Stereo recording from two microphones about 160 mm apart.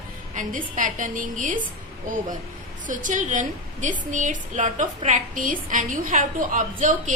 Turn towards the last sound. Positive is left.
turn(degrees=-55)  # may be behind; listen again after turning